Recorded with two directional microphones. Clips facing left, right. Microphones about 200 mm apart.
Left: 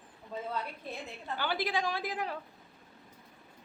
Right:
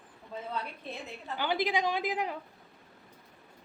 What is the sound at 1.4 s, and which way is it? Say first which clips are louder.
Speech: right 3 dB; 20° right (ahead or behind).